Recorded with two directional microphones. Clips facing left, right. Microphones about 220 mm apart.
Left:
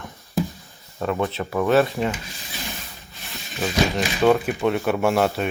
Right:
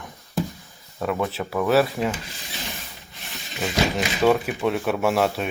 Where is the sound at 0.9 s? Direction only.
Centre (ahead or behind).